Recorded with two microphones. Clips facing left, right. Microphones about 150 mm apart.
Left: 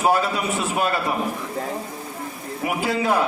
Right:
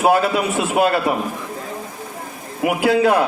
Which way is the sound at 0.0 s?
65° right (ahead or behind).